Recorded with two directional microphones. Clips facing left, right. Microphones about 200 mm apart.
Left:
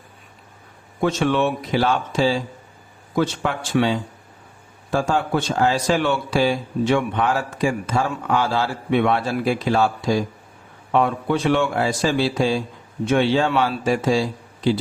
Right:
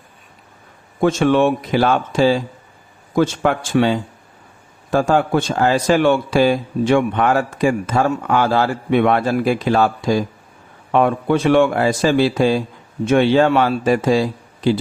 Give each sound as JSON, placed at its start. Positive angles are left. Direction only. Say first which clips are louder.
{"t": 1.0, "sound": "a man's voice", "louder": "right 5 dB", "side_deg": -50}